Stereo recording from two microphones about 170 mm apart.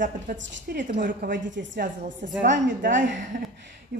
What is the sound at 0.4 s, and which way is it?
Speech, 90° right.